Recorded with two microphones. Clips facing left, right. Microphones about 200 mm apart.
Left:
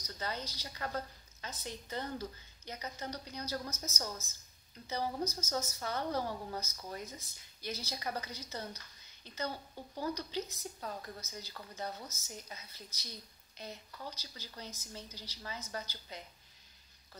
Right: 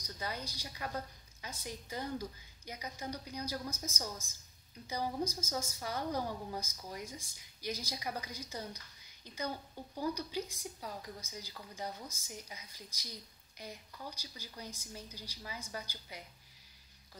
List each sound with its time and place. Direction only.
0.0 s a woman's voice: 10° right (ahead or behind)